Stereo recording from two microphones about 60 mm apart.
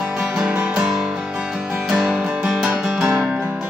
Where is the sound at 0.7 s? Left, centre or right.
Centre.